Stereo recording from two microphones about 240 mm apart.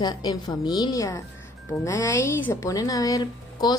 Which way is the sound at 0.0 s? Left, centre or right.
Centre.